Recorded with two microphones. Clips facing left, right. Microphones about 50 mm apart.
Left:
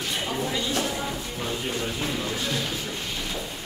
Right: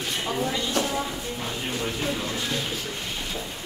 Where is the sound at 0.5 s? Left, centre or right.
Centre.